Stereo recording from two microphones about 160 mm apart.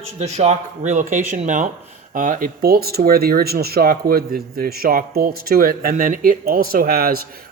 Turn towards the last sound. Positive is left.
turn(degrees=-70)  # may be behind; listen again after turning